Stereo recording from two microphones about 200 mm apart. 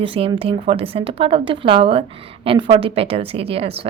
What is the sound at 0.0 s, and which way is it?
A woman's voice, 25° right (ahead or behind).